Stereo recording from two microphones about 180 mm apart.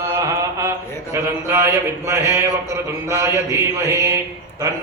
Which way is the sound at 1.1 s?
15° right (ahead or behind).